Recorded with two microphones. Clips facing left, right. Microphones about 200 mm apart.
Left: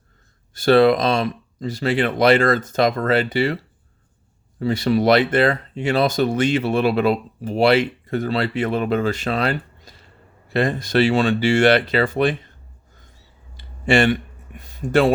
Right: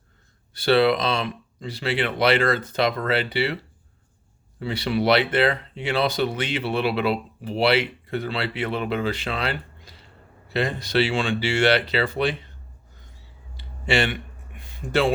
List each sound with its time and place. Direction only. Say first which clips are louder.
0.5 s speech: left 5 dB; 45° left (ahead or behind)
4.6 s speech: left 5 dB; 45° left (ahead or behind)
13.6 s a sound: left 6 dB; 50° left (ahead or behind)